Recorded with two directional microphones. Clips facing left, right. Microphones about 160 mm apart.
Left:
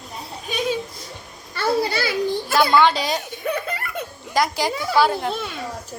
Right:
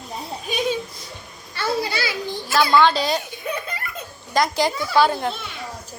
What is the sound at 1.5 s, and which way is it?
Children playing, 50° left (ahead or behind).